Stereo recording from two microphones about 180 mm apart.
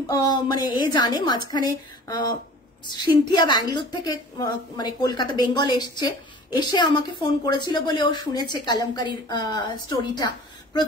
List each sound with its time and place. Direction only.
0.0 s a woman's voice: 20° left (ahead or behind)